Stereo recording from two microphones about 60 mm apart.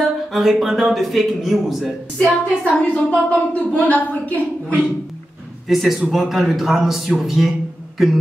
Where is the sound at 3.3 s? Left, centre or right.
Left.